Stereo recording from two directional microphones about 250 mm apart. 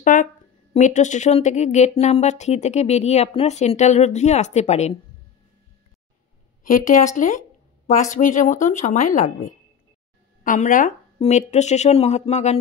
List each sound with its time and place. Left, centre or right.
0.0 s speech: left
6.6 s a woman's voice: left
10.4 s speech: left